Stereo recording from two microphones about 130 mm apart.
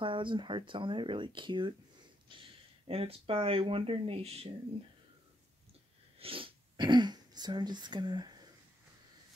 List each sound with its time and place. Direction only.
0.0 s speech: 40° right (ahead or behind)
6.1 s speech: 45° right (ahead or behind)